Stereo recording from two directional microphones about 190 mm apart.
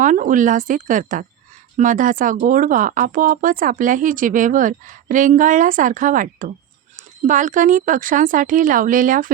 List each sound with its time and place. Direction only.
0.0 s speech: 45° right (ahead or behind)